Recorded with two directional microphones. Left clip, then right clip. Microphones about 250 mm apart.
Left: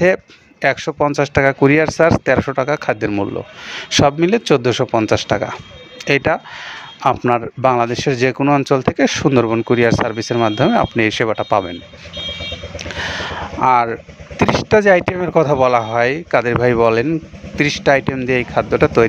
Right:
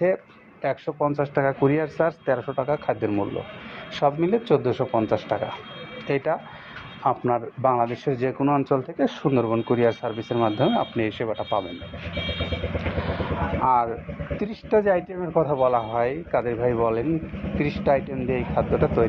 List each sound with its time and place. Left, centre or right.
0.0 s speech: left
12.7 s vehicle: left
14.5 s speech: left